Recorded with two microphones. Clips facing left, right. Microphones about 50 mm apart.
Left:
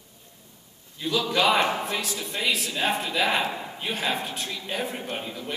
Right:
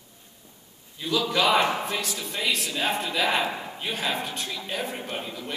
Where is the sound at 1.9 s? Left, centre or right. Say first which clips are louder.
Even; centre.